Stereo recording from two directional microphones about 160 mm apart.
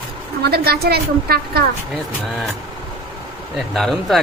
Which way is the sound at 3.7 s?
Centre (ahead or behind).